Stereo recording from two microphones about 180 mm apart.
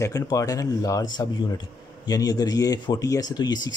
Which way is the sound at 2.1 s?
20° left (ahead or behind).